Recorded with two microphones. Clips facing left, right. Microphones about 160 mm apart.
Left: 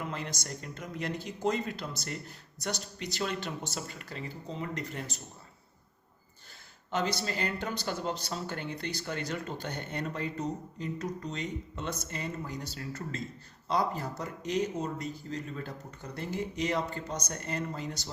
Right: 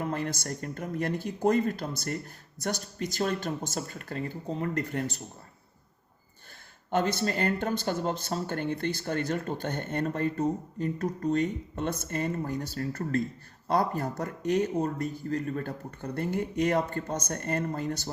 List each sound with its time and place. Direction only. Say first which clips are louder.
0.0 s speech: right 6 dB; 50° right (ahead or behind)
6.9 s speech: right 5 dB; 50° right (ahead or behind)